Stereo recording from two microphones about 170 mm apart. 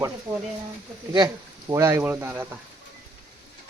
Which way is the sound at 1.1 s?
20° right (ahead or behind).